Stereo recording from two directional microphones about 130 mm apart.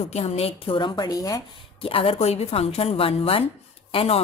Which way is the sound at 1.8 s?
45° left (ahead or behind).